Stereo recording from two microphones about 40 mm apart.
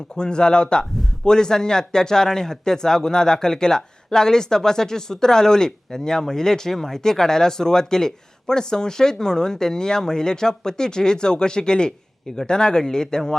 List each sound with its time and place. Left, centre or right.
0.2 s a man's voice: left